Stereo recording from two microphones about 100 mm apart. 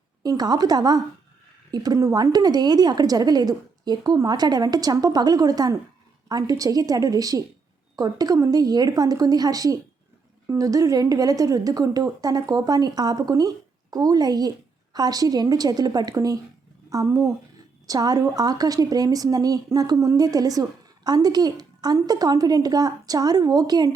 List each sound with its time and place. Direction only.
0.2 s a woman's voice: 40° right (ahead or behind)